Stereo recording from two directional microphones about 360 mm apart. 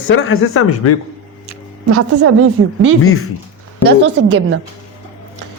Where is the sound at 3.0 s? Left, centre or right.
Left.